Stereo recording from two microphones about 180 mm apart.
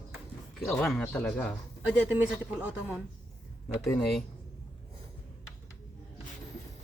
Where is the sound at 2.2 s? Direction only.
10° right (ahead or behind).